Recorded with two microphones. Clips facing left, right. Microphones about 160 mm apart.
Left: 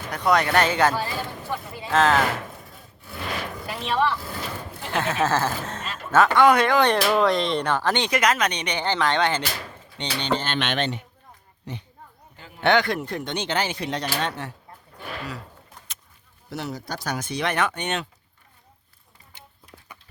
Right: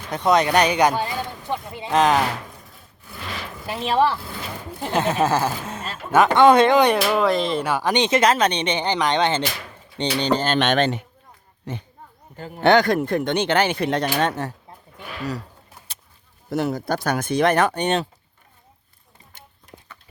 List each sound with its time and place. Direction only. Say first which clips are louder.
0.1 s speech: right 3 dB; 20° right (ahead or behind)
3.7 s speech: right 4 dB; 30° right (ahead or behind)
4.9 s speech: right 3 dB; 20° right (ahead or behind)
6.9 s speech: right 1 dB; 5° right (ahead or behind); by 9.4 s 20° right (ahead or behind)
10.0 s speech: right 5 dB; 35° right (ahead or behind)
12.4 s speech: right 4 dB; 40° right (ahead or behind)
16.5 s speech: right 9 dB; 50° right (ahead or behind); by 18.1 s 35° right (ahead or behind)